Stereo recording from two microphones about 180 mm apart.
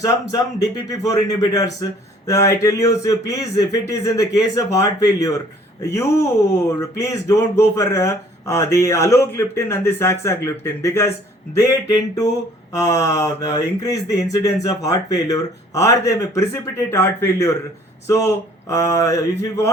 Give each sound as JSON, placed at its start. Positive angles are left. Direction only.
{"t": 0.0, "sound": "speech", "side_deg": 20}
{"t": 18.7, "sound": "speech", "side_deg": 15}